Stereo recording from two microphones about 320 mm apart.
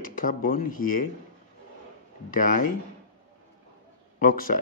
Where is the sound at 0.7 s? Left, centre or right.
Left.